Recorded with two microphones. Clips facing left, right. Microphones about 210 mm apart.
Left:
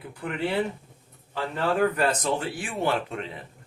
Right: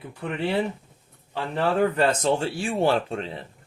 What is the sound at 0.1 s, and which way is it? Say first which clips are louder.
Speech: right 2 dB; 25° right (ahead or behind).